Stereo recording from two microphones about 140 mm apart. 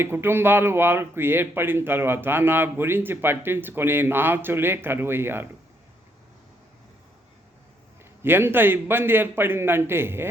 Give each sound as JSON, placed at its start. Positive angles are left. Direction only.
{"t": 0.0, "sound": "speech", "side_deg": -15}
{"t": 8.2, "sound": "speech", "side_deg": -15}